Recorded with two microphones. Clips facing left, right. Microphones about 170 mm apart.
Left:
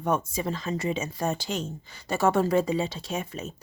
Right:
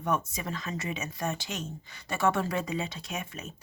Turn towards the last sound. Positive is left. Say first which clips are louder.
# left 6 dB
turn(degrees=30)  # may be behind; listen again after turning